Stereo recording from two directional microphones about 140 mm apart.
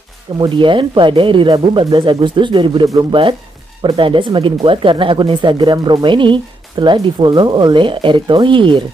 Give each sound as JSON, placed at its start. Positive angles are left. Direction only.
{"t": 0.4, "sound": "speech", "side_deg": -35}